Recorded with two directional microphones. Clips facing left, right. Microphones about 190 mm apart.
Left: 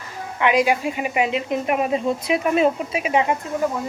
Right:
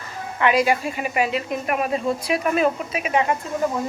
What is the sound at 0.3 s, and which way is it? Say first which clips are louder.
Speech: left 1 dB; 15° left (ahead or behind).